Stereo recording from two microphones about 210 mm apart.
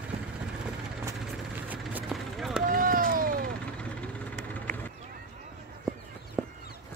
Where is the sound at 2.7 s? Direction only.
40° right (ahead or behind).